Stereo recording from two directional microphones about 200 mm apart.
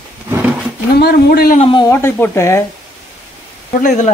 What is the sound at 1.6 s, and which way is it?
Speech, 25° left (ahead or behind).